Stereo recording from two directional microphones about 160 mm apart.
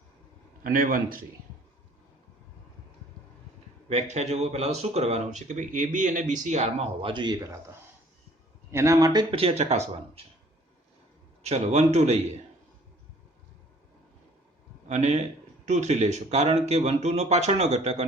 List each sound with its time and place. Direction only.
0.6 s a man's voice: 60° right (ahead or behind)
3.8 s speech: 45° right (ahead or behind)
7.0 s speech: 30° right (ahead or behind)
8.7 s speech: 20° right (ahead or behind)
9.3 s speech: 35° right (ahead or behind)
11.4 s speech: 40° right (ahead or behind)
14.8 s a man's voice: 45° right (ahead or behind)